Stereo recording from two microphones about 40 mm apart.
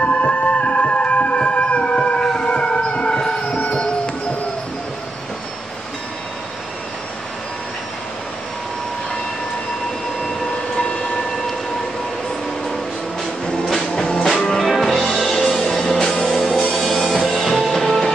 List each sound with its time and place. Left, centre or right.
0.0 s music: left
2.2 s a sound: left
3.7 s music: left
10.8 s train: left
13.7 s music: centre
14.7 s music: centre